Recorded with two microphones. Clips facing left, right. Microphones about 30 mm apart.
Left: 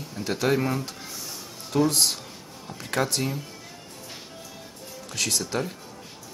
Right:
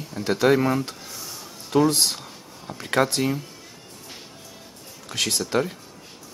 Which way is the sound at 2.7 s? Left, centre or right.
Right.